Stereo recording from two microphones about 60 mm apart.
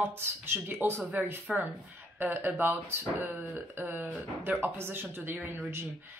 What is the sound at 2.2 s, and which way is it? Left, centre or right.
Speech, right.